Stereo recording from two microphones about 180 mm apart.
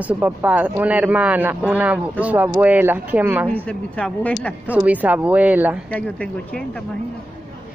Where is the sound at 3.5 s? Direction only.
5° left (ahead or behind).